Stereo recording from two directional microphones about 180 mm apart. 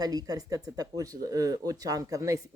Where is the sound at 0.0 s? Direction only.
20° right (ahead or behind).